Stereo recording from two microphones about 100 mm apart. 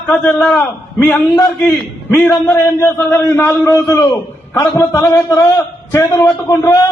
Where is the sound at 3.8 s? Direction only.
35° left (ahead or behind).